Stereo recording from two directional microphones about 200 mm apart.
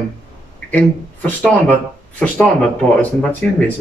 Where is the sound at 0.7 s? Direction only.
10° left (ahead or behind).